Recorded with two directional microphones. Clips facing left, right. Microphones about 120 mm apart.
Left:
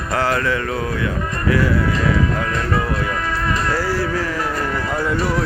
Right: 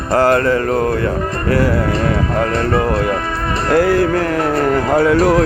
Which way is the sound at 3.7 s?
55° right (ahead or behind).